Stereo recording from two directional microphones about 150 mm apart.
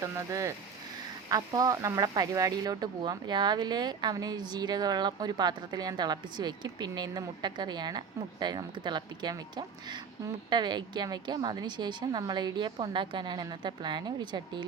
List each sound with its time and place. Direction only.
0.0 s speech: 20° right (ahead or behind)